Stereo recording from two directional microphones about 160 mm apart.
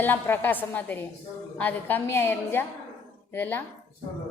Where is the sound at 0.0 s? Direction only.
10° left (ahead or behind).